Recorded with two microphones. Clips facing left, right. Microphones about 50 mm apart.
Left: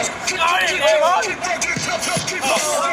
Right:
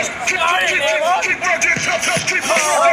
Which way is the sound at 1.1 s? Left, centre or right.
Right.